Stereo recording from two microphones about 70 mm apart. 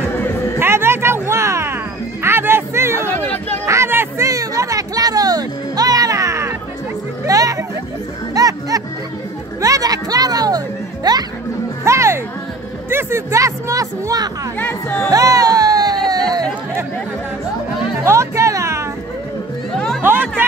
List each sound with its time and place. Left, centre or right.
0.6 s music: right
3.6 s a sound: right
4.3 s music: right
9.6 s a sound: right
11.1 s music: right
11.8 s music: right
12.9 s speech: right
14.6 s speech: left
15.0 s music: right
18.0 s music: right
20.0 s music: right